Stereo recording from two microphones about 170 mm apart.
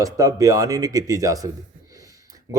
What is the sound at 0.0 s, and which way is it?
Speech, 20° right (ahead or behind).